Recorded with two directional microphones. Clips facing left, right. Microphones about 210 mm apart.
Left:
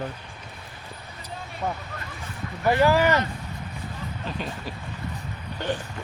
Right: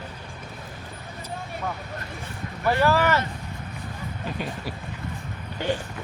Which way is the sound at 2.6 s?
15° left (ahead or behind).